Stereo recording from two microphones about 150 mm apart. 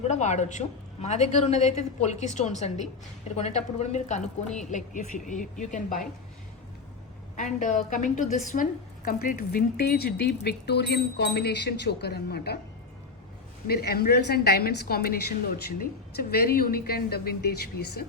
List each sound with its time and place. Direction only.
0.1 s a woman's voice: 50° left (ahead or behind)
7.3 s a woman's voice: 55° left (ahead or behind)
9.0 s speech: 80° left
13.7 s speech: 90° left
16.3 s speech: 90° left